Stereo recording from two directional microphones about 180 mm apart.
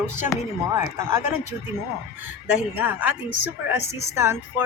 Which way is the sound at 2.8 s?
10° right (ahead or behind).